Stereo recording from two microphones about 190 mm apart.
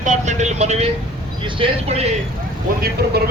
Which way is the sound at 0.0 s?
40° right (ahead or behind).